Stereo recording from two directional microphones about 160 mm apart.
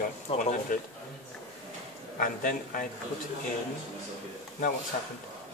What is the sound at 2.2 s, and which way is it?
Speech, 60° left (ahead or behind).